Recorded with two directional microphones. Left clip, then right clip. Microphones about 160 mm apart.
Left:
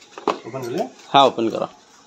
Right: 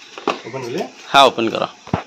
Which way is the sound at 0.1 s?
15° right (ahead or behind).